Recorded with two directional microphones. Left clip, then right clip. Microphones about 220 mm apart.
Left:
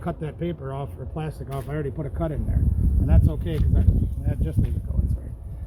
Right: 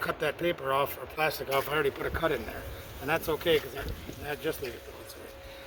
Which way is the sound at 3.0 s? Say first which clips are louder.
Right 4 dB; centre (ahead or behind).